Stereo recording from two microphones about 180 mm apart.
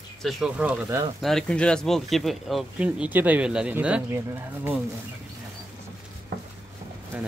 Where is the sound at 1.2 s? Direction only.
Centre (ahead or behind).